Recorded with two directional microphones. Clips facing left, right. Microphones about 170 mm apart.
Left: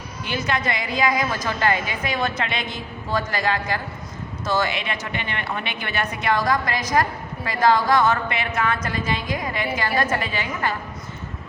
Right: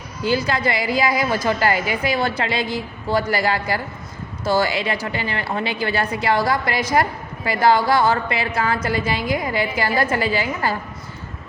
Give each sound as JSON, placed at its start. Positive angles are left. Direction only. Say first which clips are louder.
{"t": 0.3, "sound": "a woman's voice", "louder": "right 5 dB", "side_deg": -35}